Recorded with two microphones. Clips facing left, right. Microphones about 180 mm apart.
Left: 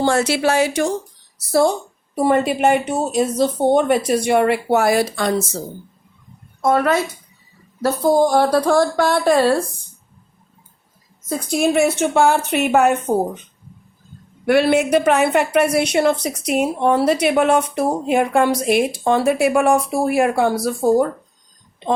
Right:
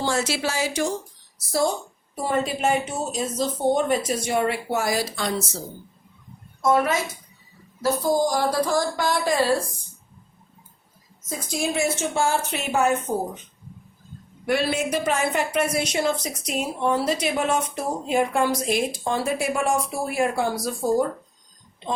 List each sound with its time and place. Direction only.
0.0 s a woman's voice: 60° left (ahead or behind)
2.1 s a woman's voice: 65° left (ahead or behind)
6.6 s a woman's voice: 65° left (ahead or behind)
11.3 s a woman's voice: 65° left (ahead or behind)
14.4 s a woman's voice: 65° left (ahead or behind)